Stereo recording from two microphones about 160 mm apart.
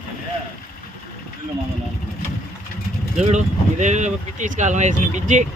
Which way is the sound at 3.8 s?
50° right (ahead or behind).